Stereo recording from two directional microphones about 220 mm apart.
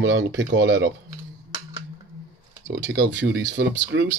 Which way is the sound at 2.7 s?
50° right (ahead or behind).